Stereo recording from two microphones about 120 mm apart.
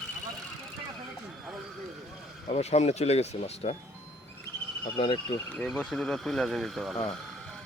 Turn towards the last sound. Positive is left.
turn(degrees=0)  # may be behind; listen again after turning